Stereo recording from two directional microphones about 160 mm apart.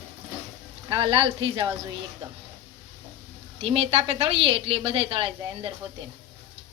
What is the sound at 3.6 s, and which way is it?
A woman's voice, 35° right (ahead or behind).